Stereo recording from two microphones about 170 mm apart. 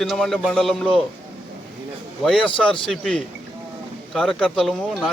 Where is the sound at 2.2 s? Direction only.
Centre (ahead or behind).